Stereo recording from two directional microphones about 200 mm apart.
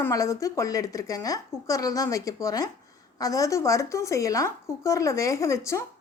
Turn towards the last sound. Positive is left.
turn(degrees=15)  # may be behind; listen again after turning